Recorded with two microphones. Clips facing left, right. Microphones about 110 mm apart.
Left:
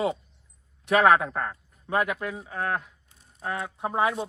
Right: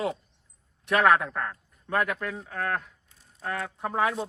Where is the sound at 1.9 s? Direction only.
10° left (ahead or behind).